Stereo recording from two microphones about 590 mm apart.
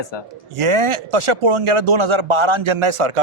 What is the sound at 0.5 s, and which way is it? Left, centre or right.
Speech, right.